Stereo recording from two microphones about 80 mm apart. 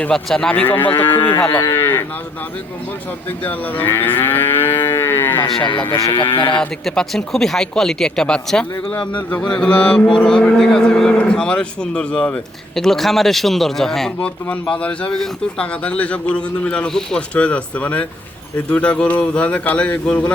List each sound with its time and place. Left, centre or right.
0.1 s speech: centre
0.5 s speech: left
3.4 s moo: left
5.6 s speech: left
6.6 s speech: centre
14.2 s speech: centre
15.1 s speech: centre